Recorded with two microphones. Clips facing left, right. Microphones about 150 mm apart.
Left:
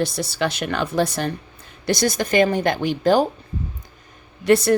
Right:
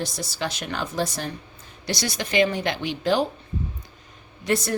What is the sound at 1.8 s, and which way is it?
Speech, 50° left (ahead or behind).